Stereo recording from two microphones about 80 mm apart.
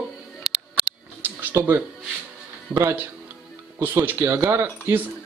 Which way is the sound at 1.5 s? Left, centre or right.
Right.